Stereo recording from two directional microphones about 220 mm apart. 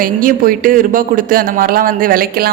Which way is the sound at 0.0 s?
40° right (ahead or behind).